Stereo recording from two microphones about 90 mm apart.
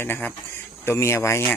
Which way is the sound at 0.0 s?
20° left (ahead or behind).